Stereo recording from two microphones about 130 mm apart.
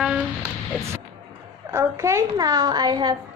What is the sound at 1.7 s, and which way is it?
A woman's voice, 25° right (ahead or behind).